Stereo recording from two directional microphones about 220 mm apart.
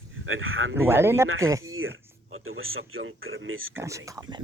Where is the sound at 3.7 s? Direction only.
15° right (ahead or behind).